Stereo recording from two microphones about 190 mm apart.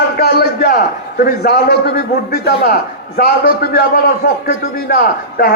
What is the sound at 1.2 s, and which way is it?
A man's voice, 55° left (ahead or behind).